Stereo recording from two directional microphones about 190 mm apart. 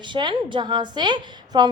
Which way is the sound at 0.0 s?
25° right (ahead or behind).